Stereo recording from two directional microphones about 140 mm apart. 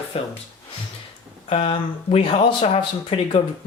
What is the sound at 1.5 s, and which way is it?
Speech, 45° left (ahead or behind).